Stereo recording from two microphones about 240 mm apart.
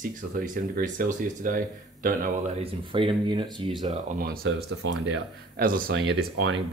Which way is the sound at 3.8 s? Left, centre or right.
Right.